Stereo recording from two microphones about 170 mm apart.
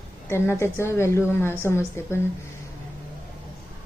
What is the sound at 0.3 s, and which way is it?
A woman's voice, 15° left (ahead or behind).